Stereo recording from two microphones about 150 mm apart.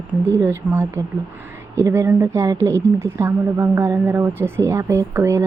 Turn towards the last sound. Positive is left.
turn(degrees=-20)  # may be behind; listen again after turning